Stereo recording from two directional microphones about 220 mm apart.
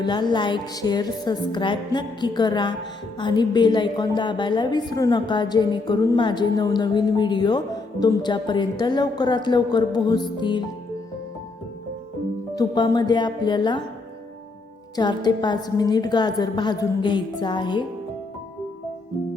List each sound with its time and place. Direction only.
0.0 s a woman's voice: 20° left (ahead or behind)
12.5 s a woman's voice: 20° left (ahead or behind)
14.9 s a woman's voice: 20° left (ahead or behind)